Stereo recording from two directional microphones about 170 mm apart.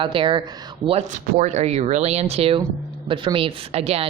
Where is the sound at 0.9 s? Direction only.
40° right (ahead or behind).